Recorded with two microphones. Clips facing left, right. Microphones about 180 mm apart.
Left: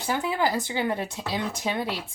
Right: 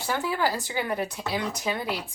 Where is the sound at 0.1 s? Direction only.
20° left (ahead or behind).